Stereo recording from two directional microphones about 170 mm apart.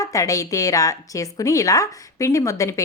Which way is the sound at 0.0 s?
20° left (ahead or behind).